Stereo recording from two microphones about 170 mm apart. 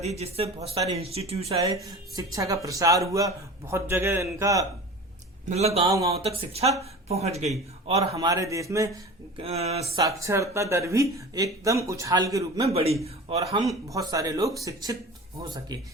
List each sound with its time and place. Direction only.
0.0 s speech: 40° right (ahead or behind)
2.1 s speech: 20° right (ahead or behind)
5.5 s speech: 40° right (ahead or behind)
5.8 s speech: 20° right (ahead or behind)
6.2 s speech: 35° right (ahead or behind)
8.1 s speech: 20° right (ahead or behind)
9.4 s speech: 35° right (ahead or behind)
10.0 s speech: 20° right (ahead or behind)
12.7 s speech: 35° right (ahead or behind)
13.7 s speech: 20° right (ahead or behind)